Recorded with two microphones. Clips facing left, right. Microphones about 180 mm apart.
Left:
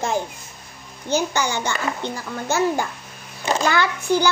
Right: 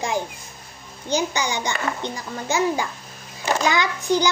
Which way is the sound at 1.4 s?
15° right (ahead or behind).